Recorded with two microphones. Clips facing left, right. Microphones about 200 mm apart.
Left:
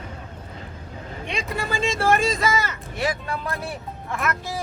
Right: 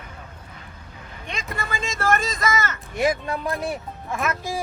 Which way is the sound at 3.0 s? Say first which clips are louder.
Right 4 dB; 15° right (ahead or behind).